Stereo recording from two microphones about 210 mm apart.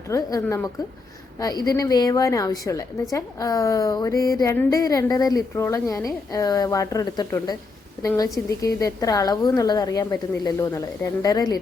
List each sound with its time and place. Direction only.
0.1 s a woman's voice: 15° left (ahead or behind)